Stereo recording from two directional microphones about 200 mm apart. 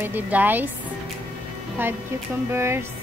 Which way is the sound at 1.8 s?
10° right (ahead or behind).